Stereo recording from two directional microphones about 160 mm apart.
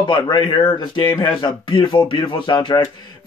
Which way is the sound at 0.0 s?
25° left (ahead or behind).